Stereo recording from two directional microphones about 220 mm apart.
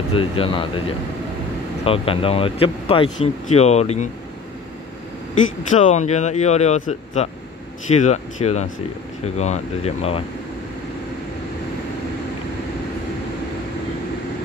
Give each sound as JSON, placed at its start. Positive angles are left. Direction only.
{"t": 0.1, "sound": "speech", "side_deg": 25}
{"t": 5.7, "sound": "speech", "side_deg": 35}